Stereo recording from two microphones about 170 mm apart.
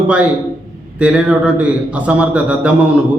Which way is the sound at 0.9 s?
5° right (ahead or behind).